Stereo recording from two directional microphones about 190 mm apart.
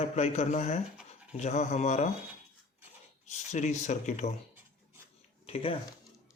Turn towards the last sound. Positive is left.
turn(degrees=30)  # may be behind; listen again after turning